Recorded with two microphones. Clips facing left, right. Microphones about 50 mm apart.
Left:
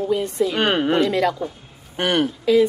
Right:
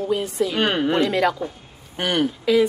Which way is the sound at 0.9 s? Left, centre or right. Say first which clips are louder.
Left 1 dB; centre.